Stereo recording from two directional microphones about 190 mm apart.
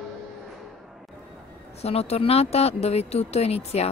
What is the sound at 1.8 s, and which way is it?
Speech, 35° left (ahead or behind).